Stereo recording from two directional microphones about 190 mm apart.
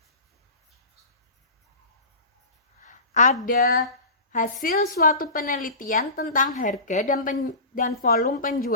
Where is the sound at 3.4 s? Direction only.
50° left (ahead or behind).